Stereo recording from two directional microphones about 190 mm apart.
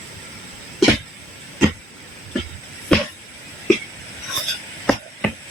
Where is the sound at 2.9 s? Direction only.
5° left (ahead or behind).